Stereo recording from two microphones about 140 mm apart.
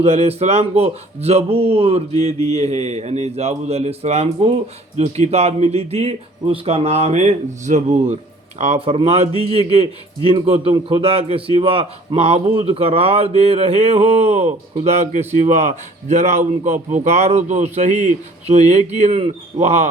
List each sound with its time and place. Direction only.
0.0 s a man's voice: 50° right (ahead or behind)